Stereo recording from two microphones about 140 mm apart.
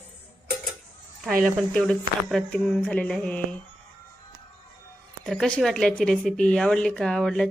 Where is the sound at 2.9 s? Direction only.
5° left (ahead or behind).